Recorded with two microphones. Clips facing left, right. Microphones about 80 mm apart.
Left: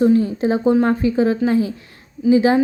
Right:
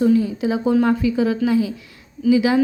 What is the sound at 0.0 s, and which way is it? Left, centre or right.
A woman's voice, left.